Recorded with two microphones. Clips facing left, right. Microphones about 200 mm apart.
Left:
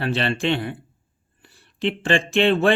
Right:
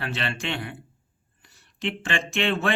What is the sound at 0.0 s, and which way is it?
Speech, 30° left (ahead or behind).